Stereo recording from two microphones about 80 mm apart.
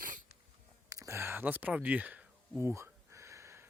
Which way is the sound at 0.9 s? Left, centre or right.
Right.